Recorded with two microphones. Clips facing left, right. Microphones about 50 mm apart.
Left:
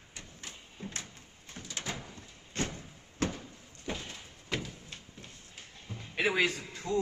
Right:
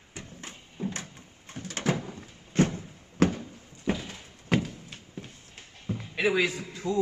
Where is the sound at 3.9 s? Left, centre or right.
Right.